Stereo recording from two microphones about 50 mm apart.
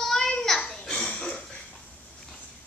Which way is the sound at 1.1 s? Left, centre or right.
Left.